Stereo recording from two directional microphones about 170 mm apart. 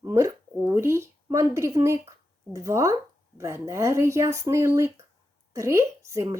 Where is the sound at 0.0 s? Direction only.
20° right (ahead or behind).